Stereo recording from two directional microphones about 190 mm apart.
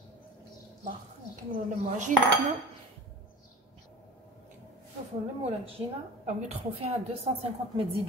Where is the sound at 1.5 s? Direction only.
40° right (ahead or behind).